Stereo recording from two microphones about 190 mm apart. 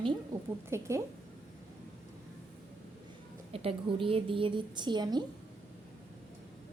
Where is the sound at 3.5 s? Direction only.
30° right (ahead or behind).